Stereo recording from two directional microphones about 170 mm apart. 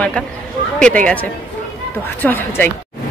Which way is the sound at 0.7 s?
5° left (ahead or behind).